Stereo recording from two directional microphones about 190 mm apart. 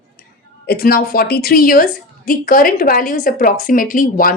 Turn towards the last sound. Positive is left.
turn(degrees=45)  # may be behind; listen again after turning